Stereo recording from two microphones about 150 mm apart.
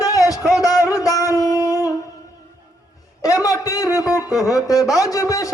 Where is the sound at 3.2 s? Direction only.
25° left (ahead or behind).